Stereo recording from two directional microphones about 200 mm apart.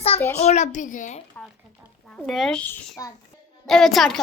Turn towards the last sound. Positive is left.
turn(degrees=0)  # may be behind; listen again after turning